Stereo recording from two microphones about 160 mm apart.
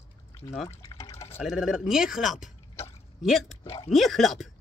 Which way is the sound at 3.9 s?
Centre (ahead or behind).